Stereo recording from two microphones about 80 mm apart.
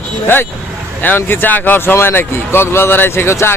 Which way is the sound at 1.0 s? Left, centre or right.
Left.